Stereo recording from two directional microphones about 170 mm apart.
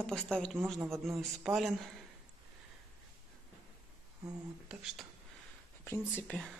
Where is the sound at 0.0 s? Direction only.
5° left (ahead or behind).